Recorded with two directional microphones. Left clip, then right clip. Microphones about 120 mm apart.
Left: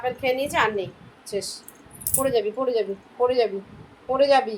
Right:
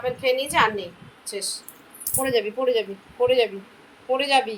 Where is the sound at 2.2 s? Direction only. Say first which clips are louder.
Even; 60° left (ahead or behind).